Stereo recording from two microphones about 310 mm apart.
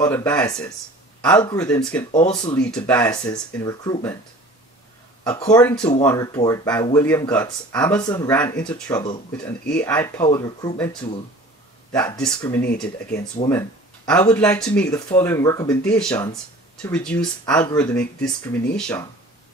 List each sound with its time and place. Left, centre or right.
0.0 s speech: centre
5.6 s speech: centre